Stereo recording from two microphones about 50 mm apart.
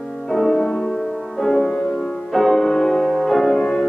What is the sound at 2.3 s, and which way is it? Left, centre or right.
Music, centre.